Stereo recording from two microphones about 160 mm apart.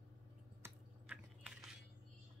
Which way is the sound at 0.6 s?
15° right (ahead or behind).